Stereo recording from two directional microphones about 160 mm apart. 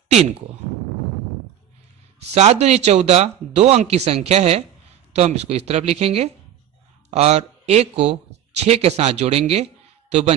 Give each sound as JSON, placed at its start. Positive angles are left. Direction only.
{"t": 2.3, "sound": "speech", "side_deg": -40}